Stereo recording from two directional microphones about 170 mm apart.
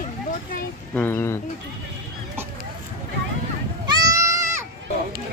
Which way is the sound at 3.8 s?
20° right (ahead or behind).